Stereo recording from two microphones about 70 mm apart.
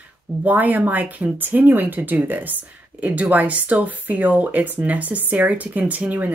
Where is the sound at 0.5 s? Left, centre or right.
Right.